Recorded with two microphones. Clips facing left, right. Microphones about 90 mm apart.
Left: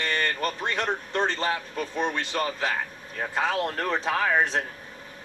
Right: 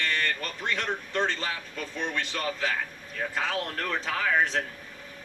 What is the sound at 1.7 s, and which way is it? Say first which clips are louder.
Speech: left 4 dB; 45° left (ahead or behind).